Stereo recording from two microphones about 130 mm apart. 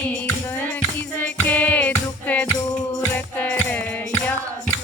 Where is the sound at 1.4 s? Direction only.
15° left (ahead or behind).